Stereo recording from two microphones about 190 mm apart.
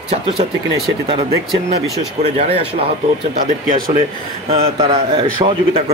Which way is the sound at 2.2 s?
30° right (ahead or behind).